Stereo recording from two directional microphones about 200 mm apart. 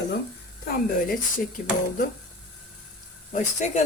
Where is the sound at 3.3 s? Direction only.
35° left (ahead or behind).